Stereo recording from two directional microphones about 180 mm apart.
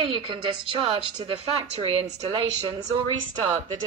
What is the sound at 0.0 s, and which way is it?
A woman's voice, 30° right (ahead or behind).